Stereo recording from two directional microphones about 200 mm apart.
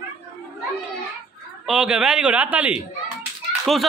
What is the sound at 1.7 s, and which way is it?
Speech, 5° right (ahead or behind).